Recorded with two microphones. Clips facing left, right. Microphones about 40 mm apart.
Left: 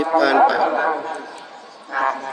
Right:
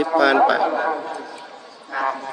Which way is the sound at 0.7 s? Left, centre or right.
Centre.